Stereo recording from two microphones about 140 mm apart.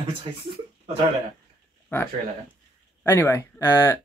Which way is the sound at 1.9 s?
15° left (ahead or behind).